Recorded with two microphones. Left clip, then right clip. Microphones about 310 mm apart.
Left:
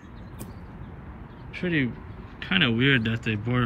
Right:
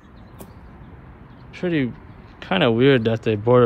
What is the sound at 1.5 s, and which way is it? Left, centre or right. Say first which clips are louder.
Speech: right 4 dB; centre.